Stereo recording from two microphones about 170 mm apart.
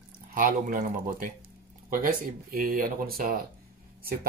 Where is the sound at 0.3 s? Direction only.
55° right (ahead or behind).